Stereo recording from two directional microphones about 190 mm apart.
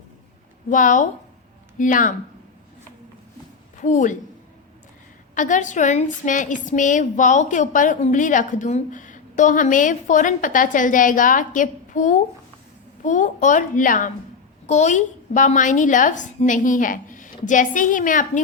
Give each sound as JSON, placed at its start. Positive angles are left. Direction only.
{"t": 0.7, "sound": "a woman's voice", "side_deg": 45}
{"t": 3.8, "sound": "a woman's voice", "side_deg": 40}
{"t": 5.3, "sound": "a woman's voice", "side_deg": 40}